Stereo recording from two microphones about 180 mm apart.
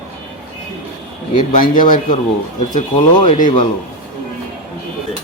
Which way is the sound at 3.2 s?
45° left (ahead or behind).